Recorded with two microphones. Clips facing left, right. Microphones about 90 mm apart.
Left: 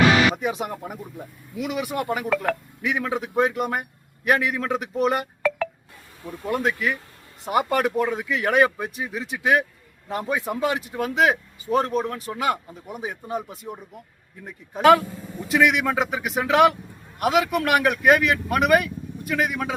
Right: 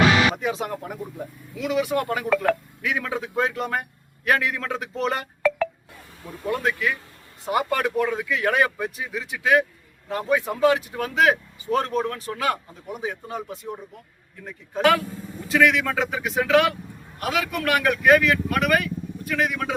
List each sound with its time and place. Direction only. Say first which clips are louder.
0.3 s speech: even; 15° left (ahead or behind)
6.5 s speech: left 1 dB; 20° left (ahead or behind)